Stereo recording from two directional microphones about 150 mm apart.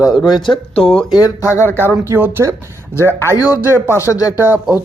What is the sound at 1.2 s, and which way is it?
Speech, 20° left (ahead or behind).